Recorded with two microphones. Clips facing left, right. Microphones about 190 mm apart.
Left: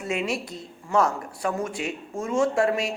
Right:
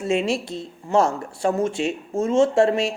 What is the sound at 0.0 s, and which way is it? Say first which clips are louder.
Speech: right 6 dB; 30° right (ahead or behind).